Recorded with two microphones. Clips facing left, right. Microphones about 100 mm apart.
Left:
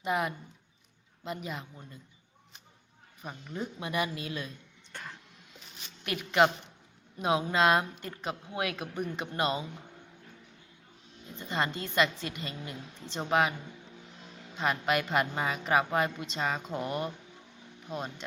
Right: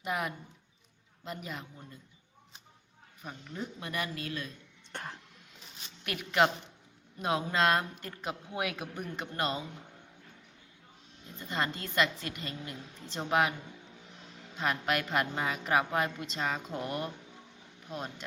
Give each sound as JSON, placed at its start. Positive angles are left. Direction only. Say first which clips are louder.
{"t": 0.0, "sound": "a woman's voice", "louder": "left 4 dB", "side_deg": 0}
{"t": 3.2, "sound": "speech", "louder": "left 3 dB", "side_deg": 5}
{"t": 4.9, "sound": "speech", "louder": "right 3 dB", "side_deg": -20}
{"t": 6.1, "sound": "a woman's voice", "louder": "left 2 dB", "side_deg": 0}
{"t": 11.3, "sound": "a woman's voice", "louder": "left 2 dB", "side_deg": 0}
{"t": 14.5, "sound": "a woman's voice", "louder": "left 2 dB", "side_deg": 0}